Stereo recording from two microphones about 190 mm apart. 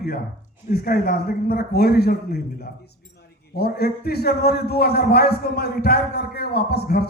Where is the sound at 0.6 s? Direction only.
55° left (ahead or behind).